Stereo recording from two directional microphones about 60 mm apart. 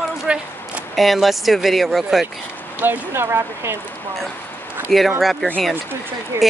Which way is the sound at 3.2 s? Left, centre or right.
Right.